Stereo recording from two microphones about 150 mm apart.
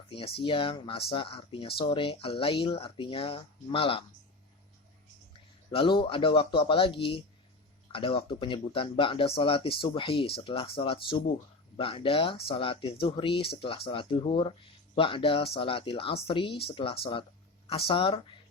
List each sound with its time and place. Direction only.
0.1 s speech: 40° left (ahead or behind)
5.7 s speech: 35° left (ahead or behind)